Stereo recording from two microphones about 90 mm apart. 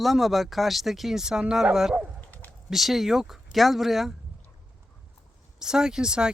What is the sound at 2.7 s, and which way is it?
Speech, centre (ahead or behind).